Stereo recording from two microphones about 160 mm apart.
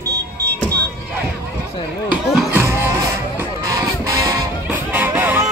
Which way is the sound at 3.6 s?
20° right (ahead or behind).